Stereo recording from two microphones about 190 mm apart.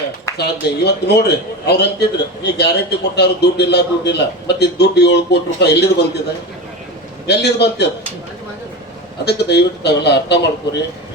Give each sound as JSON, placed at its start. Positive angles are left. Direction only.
{"t": 0.3, "sound": "a man's voice", "side_deg": 60}
{"t": 7.3, "sound": "a man's voice", "side_deg": 60}
{"t": 9.2, "sound": "a man's voice", "side_deg": 60}